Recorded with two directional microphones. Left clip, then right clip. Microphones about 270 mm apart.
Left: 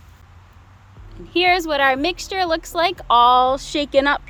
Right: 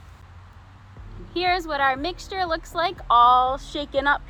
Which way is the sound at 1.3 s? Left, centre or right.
Left.